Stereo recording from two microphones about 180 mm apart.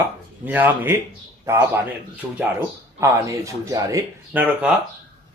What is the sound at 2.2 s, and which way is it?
A man's voice, 10° right (ahead or behind).